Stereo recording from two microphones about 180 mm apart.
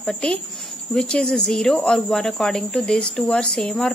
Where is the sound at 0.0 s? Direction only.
5° left (ahead or behind).